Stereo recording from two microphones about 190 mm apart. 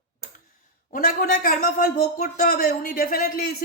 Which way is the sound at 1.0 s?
50° left (ahead or behind).